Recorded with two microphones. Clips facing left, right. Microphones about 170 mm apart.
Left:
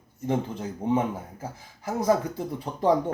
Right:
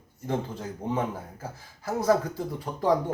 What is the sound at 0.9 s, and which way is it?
Speech, 20° left (ahead or behind).